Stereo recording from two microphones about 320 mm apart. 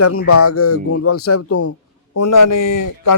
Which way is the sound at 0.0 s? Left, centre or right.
Left.